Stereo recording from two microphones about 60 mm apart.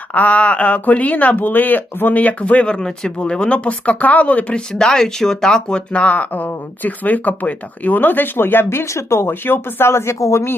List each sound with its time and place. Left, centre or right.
0.1 s speech: left
4.7 s speech: centre; by 10.2 s left
10.2 s a man's voice: left